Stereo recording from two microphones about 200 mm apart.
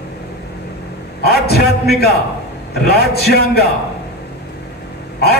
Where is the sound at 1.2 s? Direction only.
50° left (ahead or behind).